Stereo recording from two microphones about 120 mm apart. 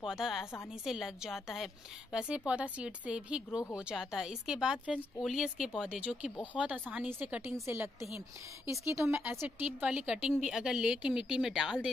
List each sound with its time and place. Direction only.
0.0 s a woman's voice: 5° right (ahead or behind)